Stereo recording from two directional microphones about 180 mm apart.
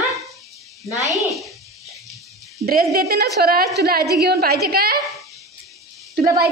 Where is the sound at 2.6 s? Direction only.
55° right (ahead or behind).